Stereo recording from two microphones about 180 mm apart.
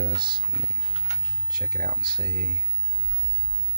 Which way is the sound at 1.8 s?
60° right (ahead or behind).